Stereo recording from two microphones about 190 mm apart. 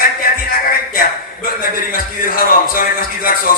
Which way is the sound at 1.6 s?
50° left (ahead or behind).